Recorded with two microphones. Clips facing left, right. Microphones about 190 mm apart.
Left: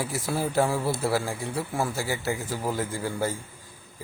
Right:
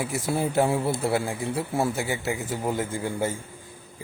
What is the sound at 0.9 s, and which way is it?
Speech, centre (ahead or behind).